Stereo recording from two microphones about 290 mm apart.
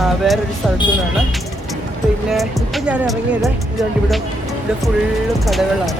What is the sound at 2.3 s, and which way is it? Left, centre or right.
Speech, centre.